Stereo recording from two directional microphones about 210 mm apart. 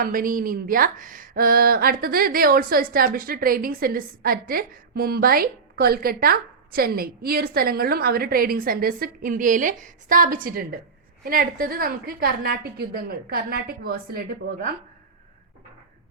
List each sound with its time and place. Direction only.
0.0 s speech: 40° right (ahead or behind)